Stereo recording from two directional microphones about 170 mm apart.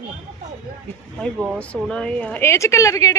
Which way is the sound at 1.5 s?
5° left (ahead or behind).